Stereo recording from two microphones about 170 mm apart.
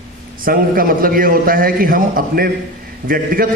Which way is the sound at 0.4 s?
55° right (ahead or behind).